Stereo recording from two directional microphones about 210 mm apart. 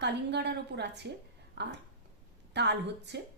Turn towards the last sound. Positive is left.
turn(degrees=-55)  # may be behind; listen again after turning